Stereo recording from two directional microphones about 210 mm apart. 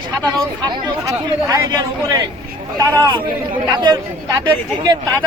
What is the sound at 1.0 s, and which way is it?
Speech, 15° right (ahead or behind).